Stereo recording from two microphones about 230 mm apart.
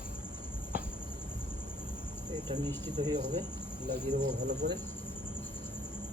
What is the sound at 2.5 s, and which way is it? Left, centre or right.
Speech, centre.